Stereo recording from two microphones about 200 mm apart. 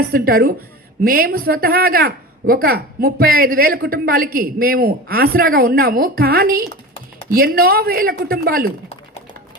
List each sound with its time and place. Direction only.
0.1 s a woman's voice: 45° right (ahead or behind)